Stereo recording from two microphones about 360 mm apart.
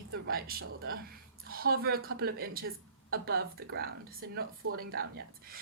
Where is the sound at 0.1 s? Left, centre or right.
Right.